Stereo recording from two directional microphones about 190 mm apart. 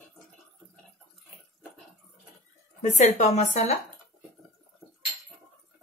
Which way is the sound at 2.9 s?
40° left (ahead or behind).